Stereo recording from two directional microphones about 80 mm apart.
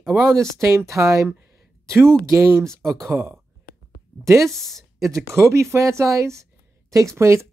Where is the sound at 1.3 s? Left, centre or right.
Right.